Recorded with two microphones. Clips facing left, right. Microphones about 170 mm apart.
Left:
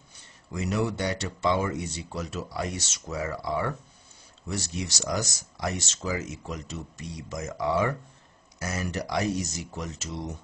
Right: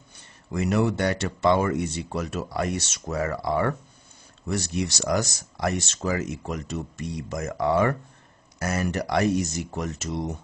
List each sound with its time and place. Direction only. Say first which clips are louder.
0.5 s speech: right 5 dB; 60° right (ahead or behind)